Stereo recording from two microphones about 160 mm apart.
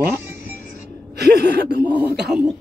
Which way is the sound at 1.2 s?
85° right.